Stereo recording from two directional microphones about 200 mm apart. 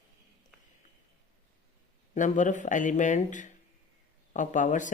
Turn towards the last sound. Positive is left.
turn(degrees=40)  # may be behind; listen again after turning